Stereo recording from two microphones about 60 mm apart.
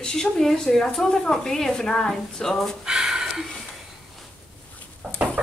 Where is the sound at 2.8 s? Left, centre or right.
Centre.